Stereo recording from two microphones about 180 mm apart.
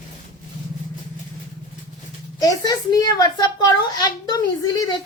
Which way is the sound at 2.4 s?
20° left (ahead or behind).